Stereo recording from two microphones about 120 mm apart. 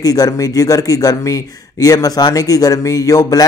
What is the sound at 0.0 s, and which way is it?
Speech, 30° left (ahead or behind).